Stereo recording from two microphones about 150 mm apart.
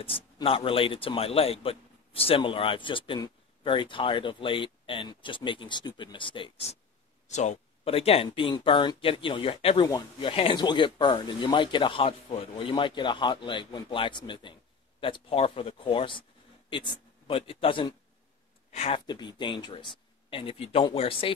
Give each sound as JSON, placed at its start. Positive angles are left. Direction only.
{"t": 0.0, "sound": "a man's voice", "side_deg": 35}
{"t": 7.2, "sound": "a man's voice", "side_deg": 50}
{"t": 9.8, "sound": "a man's voice", "side_deg": 25}
{"t": 18.7, "sound": "speech", "side_deg": 45}
{"t": 19.0, "sound": "a man's voice", "side_deg": 30}